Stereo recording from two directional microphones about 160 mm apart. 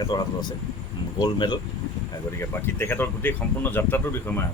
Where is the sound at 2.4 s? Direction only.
15° left (ahead or behind).